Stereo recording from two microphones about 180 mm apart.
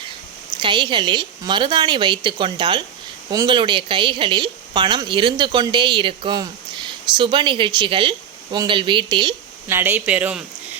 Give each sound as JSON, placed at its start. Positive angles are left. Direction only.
{"t": 0.6, "sound": "a woman's voice", "side_deg": -25}
{"t": 9.6, "sound": "speech", "side_deg": -10}